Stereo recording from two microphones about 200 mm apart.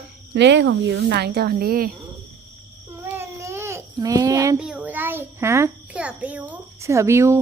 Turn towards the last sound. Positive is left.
turn(degrees=-15)  # may be behind; listen again after turning